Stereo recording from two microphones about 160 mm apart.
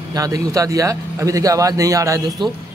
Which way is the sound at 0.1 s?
20° right (ahead or behind).